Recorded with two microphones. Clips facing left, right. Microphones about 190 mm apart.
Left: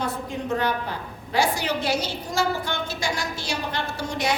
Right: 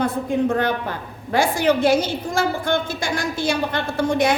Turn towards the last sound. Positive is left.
turn(degrees=-55)  # may be behind; listen again after turning